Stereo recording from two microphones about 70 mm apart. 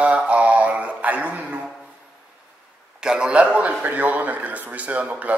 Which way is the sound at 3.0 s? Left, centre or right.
Centre.